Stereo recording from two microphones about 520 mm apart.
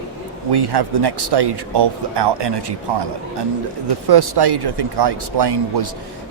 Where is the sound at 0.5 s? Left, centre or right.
Right.